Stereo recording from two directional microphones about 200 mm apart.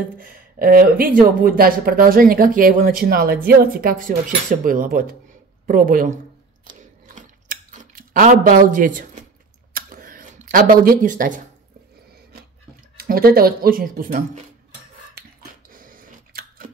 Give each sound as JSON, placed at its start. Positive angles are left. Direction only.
{"t": 0.2, "sound": "speech", "side_deg": -45}
{"t": 6.7, "sound": "chewing", "side_deg": -40}
{"t": 9.8, "sound": "a sound", "side_deg": -45}
{"t": 12.9, "sound": "speech", "side_deg": -50}
{"t": 15.7, "sound": "chewing", "side_deg": -45}